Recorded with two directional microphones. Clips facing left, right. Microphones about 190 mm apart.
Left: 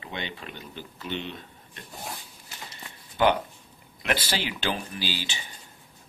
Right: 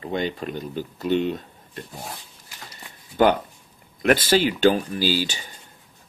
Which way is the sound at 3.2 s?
40° right (ahead or behind).